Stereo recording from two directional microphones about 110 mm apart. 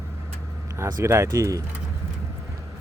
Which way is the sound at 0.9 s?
25° right (ahead or behind).